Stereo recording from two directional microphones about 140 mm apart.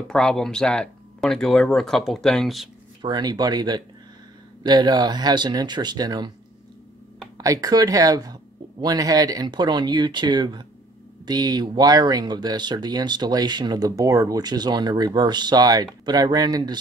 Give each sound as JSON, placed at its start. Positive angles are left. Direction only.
{"t": 0.1, "sound": "speech", "side_deg": 5}
{"t": 3.0, "sound": "speech", "side_deg": -30}
{"t": 7.3, "sound": "speech", "side_deg": -25}